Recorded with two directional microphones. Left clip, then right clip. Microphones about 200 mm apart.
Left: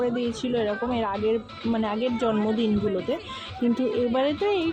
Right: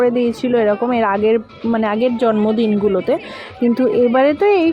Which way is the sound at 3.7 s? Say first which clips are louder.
Right 12 dB; 20° right (ahead or behind).